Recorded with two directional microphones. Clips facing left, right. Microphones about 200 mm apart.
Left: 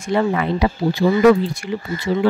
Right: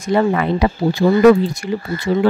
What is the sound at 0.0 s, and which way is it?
Speech, 45° right (ahead or behind).